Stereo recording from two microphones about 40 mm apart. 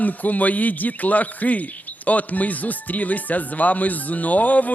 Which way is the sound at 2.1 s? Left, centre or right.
Left.